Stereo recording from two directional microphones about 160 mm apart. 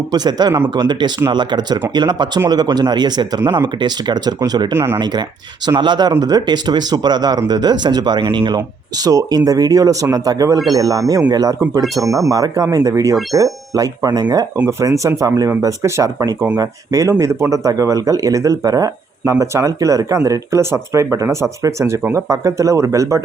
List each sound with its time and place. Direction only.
0.1 s speech: 25° right (ahead or behind)
4.7 s speech: 15° right (ahead or behind)
4.9 s speech: 25° right (ahead or behind)